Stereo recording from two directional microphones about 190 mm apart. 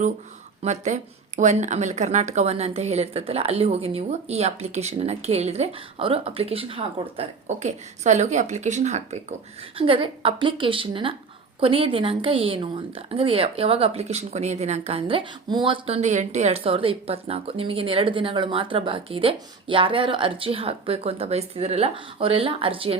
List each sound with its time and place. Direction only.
0.6 s speech: 35° right (ahead or behind)